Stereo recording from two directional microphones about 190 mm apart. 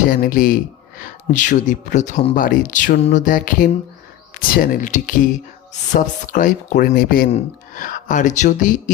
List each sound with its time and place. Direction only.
0.1 s speech: 45° left (ahead or behind)